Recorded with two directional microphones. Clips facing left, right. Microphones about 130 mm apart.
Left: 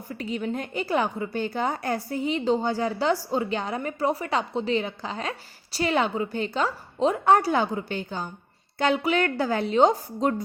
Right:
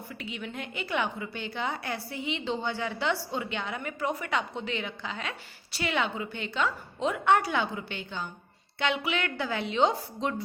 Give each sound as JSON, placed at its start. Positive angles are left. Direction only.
{"t": 0.1, "sound": "a woman's voice", "side_deg": 40}